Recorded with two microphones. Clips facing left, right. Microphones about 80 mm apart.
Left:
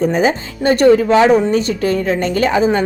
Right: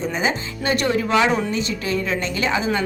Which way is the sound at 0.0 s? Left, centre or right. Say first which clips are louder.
Left 8 dB; left.